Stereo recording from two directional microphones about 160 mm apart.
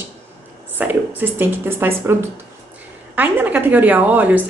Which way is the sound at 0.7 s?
10° right (ahead or behind).